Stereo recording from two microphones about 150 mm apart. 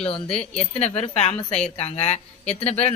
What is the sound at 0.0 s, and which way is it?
Speech, 45° left (ahead or behind).